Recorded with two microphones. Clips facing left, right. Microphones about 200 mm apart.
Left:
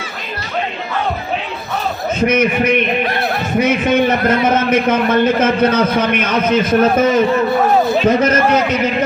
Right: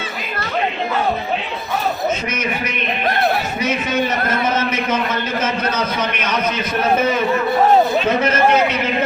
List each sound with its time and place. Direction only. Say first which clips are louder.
2.2 s a man's voice: left 10 dB; 55° left (ahead or behind)